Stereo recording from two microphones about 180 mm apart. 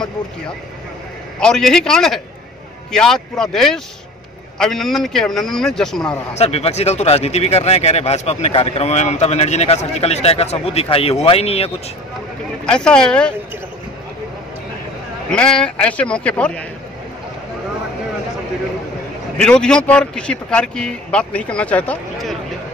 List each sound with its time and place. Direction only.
1.4 s speech: 5° left (ahead or behind)
6.3 s speech: 35° left (ahead or behind)
12.6 s speech: 5° left (ahead or behind)
15.3 s speech: 5° left (ahead or behind)
19.3 s speech: 5° left (ahead or behind)